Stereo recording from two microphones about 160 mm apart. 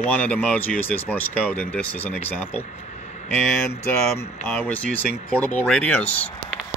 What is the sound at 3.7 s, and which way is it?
Speech, 15° left (ahead or behind).